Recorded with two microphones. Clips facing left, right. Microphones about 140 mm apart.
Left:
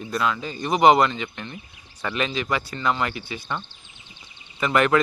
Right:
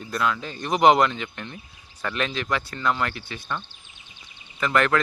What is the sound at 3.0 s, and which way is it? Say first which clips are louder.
Speech: left 1 dB; 10° left (ahead or behind).